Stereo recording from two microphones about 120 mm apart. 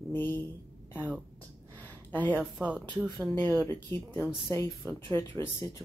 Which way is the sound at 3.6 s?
20° left (ahead or behind).